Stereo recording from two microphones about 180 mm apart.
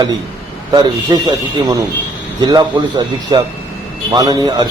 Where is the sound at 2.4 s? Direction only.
20° right (ahead or behind).